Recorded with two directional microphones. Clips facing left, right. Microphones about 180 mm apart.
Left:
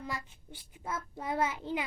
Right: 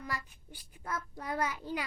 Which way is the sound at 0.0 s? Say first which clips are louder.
Left 1 dB; 25° left (ahead or behind).